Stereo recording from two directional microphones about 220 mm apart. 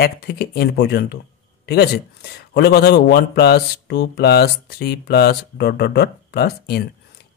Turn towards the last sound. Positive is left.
turn(degrees=45)  # may be behind; listen again after turning